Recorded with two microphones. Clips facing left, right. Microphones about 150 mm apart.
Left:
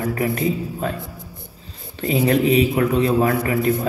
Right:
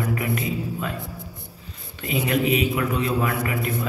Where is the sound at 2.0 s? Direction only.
35° left (ahead or behind).